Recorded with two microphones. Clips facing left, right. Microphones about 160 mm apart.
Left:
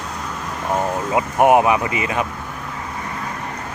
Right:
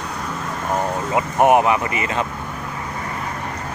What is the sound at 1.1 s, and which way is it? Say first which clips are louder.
Speech: left 1 dB; 15° left (ahead or behind).